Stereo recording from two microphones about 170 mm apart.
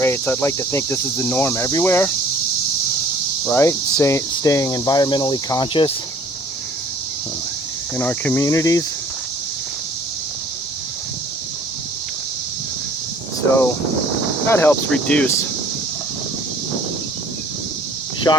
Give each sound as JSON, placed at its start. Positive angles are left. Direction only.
{"t": 0.0, "sound": "speech", "side_deg": 10}
{"t": 3.5, "sound": "speech", "side_deg": 15}
{"t": 7.9, "sound": "speech", "side_deg": 10}
{"t": 14.4, "sound": "speech", "side_deg": 15}
{"t": 18.3, "sound": "speech", "side_deg": 20}